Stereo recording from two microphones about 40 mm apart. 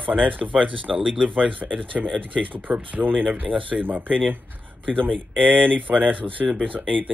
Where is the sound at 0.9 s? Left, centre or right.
Centre.